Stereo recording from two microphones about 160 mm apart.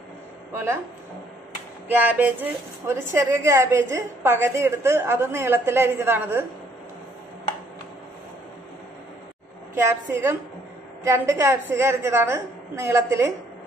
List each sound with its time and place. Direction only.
0.5 s speech: 15° right (ahead or behind)
1.9 s a woman's voice: 10° right (ahead or behind)
9.8 s a woman's voice: 15° right (ahead or behind)